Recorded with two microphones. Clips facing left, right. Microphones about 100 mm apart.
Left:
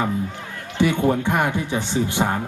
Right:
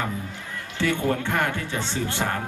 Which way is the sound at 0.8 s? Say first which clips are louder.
Left 5 dB; 15° left (ahead or behind).